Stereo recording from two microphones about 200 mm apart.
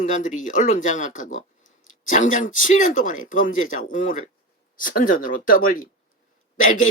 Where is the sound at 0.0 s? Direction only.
40° left (ahead or behind).